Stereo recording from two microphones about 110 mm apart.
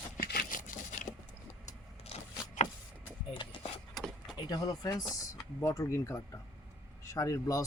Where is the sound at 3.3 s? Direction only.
50° left (ahead or behind).